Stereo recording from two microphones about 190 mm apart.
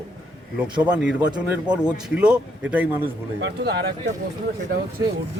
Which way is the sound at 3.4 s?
65° right (ahead or behind).